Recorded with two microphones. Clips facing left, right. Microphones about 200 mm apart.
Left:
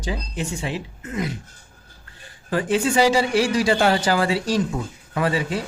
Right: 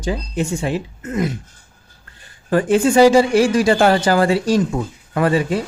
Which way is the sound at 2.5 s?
50° right (ahead or behind).